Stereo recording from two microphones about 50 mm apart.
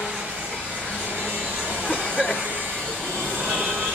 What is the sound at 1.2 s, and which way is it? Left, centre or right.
Vacuum cleaner, right.